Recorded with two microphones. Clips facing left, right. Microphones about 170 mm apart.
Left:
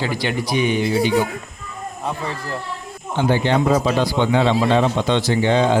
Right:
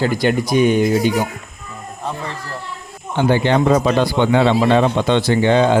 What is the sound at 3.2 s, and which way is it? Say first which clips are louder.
A man's voice: right 3 dB; 60° right (ahead or behind).